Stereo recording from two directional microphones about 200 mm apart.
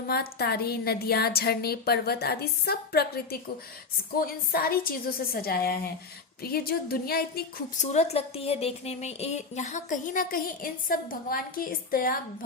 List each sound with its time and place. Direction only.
0.1 s a woman's voice: 50° left (ahead or behind)
7.9 s speech: 35° left (ahead or behind)